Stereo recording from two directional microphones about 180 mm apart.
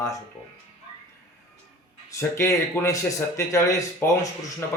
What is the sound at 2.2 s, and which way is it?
A man's voice, 15° left (ahead or behind).